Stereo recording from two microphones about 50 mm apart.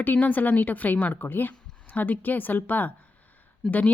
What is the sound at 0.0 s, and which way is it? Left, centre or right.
Speech, left.